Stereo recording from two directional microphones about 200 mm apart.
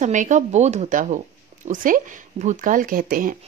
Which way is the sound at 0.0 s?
40° right (ahead or behind).